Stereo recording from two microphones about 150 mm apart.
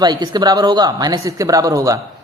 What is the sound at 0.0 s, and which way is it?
Speech, 30° right (ahead or behind).